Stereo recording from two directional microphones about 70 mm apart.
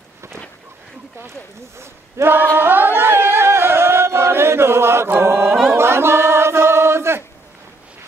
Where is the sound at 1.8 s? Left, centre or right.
Right.